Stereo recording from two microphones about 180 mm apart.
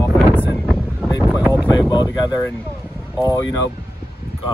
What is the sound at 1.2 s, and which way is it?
Wind noise, 10° right (ahead or behind).